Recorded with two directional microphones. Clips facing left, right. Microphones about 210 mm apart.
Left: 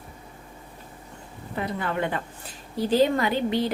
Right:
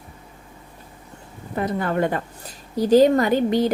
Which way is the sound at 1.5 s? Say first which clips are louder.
Right 6 dB; 45° right (ahead or behind).